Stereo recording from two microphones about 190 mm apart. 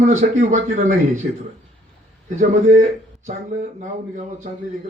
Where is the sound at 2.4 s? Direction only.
40° right (ahead or behind).